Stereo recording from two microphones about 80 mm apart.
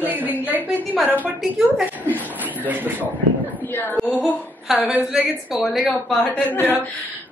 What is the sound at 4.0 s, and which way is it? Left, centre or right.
A woman's voice, centre.